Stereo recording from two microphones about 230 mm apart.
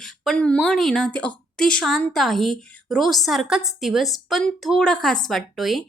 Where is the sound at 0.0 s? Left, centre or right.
Centre.